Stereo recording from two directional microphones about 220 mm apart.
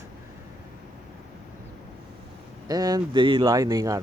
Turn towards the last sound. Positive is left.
turn(degrees=-15)  # may be behind; listen again after turning